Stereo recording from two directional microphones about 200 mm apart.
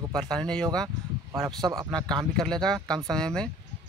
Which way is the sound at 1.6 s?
20° right (ahead or behind).